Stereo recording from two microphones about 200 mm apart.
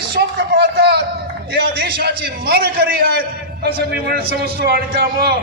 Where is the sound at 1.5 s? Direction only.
55° right (ahead or behind).